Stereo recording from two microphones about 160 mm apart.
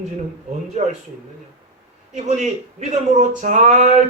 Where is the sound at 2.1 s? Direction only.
45° right (ahead or behind).